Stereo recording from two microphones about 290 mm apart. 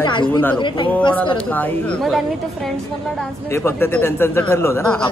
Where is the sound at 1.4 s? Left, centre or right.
Centre.